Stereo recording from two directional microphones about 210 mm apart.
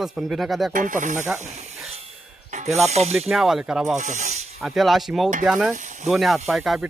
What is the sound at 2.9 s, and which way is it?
Snake, 30° right (ahead or behind).